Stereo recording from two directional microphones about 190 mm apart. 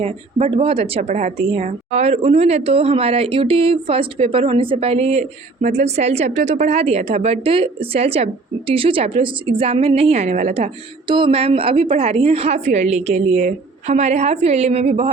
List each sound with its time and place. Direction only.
0.0 s speech: 35° right (ahead or behind)